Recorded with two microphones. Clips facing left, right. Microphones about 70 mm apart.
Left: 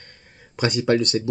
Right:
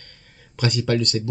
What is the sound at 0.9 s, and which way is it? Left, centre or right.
Speech, left.